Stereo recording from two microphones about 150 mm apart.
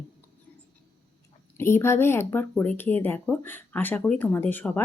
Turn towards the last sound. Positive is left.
turn(degrees=15)  # may be behind; listen again after turning